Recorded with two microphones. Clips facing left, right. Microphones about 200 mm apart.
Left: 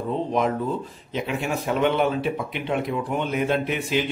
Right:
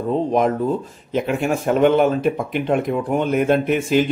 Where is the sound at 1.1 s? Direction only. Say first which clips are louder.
Right 6 dB; 50° right (ahead or behind).